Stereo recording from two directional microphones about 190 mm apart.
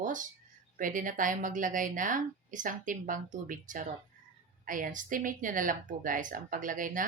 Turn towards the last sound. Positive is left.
turn(degrees=-45)  # may be behind; listen again after turning